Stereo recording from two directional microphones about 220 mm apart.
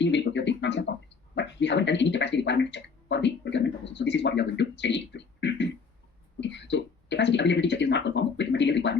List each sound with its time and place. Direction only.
0.0 s speech: 55° left (ahead or behind)